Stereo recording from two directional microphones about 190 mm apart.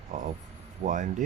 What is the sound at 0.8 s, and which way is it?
Speech, 40° right (ahead or behind).